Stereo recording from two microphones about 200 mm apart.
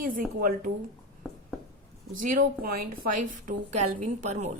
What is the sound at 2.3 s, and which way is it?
A woman's voice, 45° right (ahead or behind).